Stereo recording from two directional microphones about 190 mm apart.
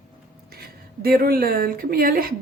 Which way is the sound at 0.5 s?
55° right (ahead or behind).